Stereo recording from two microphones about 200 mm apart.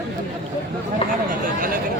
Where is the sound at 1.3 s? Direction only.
45° right (ahead or behind).